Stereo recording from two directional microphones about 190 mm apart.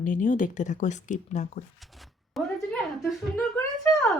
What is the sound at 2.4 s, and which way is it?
Speech, centre (ahead or behind).